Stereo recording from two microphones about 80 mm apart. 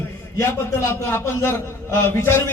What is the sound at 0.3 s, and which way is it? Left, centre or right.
A man's voice, left.